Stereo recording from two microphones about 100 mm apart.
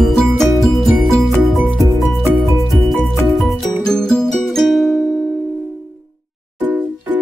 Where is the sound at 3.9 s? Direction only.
5° left (ahead or behind).